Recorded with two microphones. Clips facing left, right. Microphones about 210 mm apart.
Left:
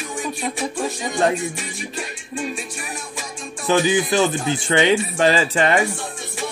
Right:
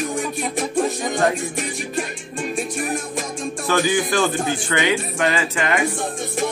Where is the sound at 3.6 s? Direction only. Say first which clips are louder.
Left 2 dB; 20° left (ahead or behind).